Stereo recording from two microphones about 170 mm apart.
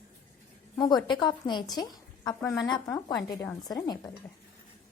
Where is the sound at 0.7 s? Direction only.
25° left (ahead or behind).